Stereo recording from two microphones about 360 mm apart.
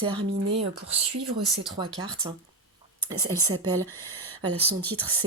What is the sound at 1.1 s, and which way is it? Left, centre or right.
Speech, right.